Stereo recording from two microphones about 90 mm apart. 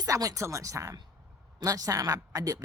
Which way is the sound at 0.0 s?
40° right (ahead or behind).